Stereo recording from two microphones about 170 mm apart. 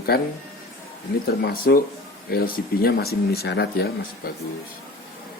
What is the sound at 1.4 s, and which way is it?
Speech, 60° left (ahead or behind).